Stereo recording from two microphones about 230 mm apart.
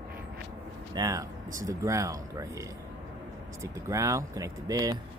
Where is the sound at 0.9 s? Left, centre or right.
Centre.